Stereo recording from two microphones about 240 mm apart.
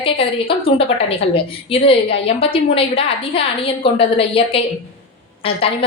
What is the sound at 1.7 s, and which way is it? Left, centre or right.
A woman's voice, left.